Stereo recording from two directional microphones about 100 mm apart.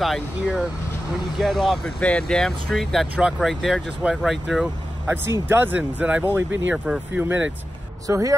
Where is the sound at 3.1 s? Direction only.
10° right (ahead or behind).